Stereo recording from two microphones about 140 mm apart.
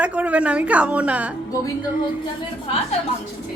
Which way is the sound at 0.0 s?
10° right (ahead or behind).